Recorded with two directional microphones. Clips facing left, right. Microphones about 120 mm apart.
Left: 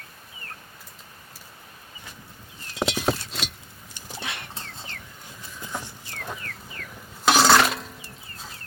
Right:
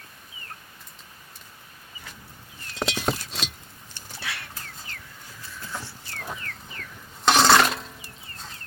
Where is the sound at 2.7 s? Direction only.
5° left (ahead or behind).